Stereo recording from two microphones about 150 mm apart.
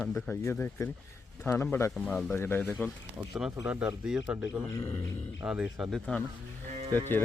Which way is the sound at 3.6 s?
10° right (ahead or behind).